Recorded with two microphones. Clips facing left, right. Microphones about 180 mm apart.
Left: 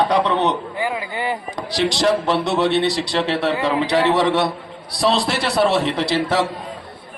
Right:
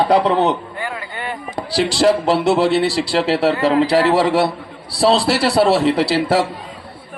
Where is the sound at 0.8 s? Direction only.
15° left (ahead or behind).